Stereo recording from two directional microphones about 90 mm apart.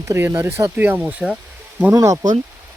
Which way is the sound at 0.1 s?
25° right (ahead or behind).